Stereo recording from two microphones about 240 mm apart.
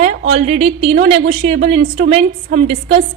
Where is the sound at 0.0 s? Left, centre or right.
Right.